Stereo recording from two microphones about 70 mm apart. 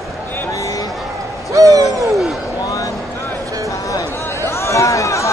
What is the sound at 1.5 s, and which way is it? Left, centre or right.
Hoot, right.